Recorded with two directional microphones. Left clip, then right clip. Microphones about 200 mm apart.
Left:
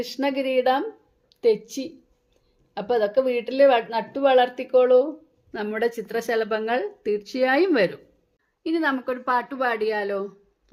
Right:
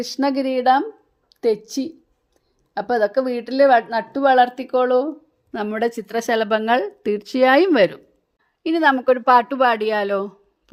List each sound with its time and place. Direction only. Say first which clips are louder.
0.0 s a woman's voice: right 4 dB; 35° right (ahead or behind)